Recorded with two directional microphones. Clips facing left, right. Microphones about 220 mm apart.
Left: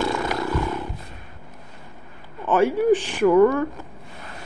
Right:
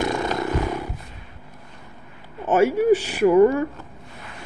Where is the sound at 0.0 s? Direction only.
20° right (ahead or behind).